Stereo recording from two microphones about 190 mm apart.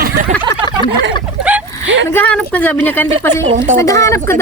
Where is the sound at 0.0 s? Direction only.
45° right (ahead or behind).